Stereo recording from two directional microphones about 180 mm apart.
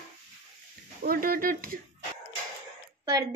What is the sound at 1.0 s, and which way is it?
Speech, 55° right (ahead or behind).